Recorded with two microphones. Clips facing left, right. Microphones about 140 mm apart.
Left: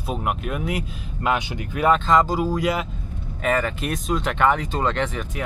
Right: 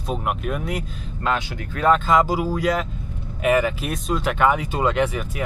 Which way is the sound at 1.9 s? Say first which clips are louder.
Right 1 dB; 5° right (ahead or behind).